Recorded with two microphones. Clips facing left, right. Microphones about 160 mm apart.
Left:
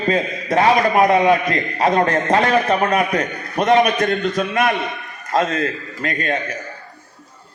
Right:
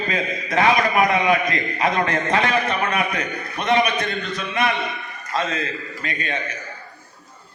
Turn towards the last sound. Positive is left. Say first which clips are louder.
# left 5 dB
turn(degrees=45)  # may be behind; listen again after turning